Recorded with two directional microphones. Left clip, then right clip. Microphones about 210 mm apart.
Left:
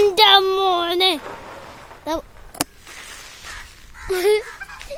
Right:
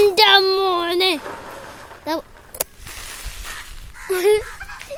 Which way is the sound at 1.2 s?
55° right (ahead or behind).